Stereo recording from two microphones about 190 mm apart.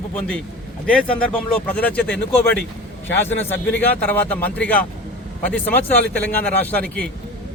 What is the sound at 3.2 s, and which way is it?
Speech, 10° left (ahead or behind).